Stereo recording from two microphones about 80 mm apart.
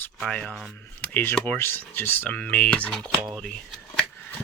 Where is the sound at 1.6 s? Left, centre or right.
Left; by 3.0 s centre.